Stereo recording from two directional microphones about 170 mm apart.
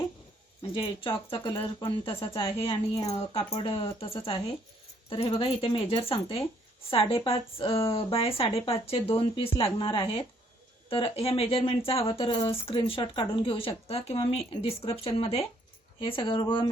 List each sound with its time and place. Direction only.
0.7 s speech: 30° left (ahead or behind)